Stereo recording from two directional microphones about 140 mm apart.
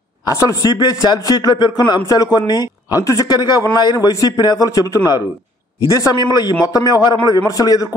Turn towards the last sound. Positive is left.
turn(degrees=25)  # may be behind; listen again after turning